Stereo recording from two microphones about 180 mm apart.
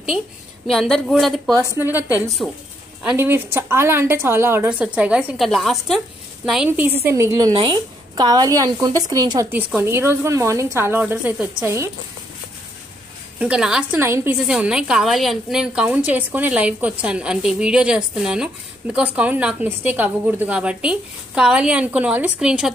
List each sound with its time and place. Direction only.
0.7 s a woman's voice: centre (ahead or behind)
3.0 s a woman's voice: 10° right (ahead or behind)
9.5 s a woman's voice: 10° right (ahead or behind)
13.4 s a woman's voice: 5° right (ahead or behind)